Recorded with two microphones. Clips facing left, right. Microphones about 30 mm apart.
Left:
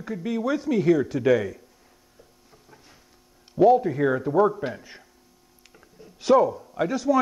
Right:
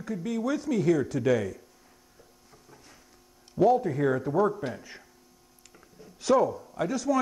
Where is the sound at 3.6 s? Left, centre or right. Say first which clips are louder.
Left 5 dB; centre.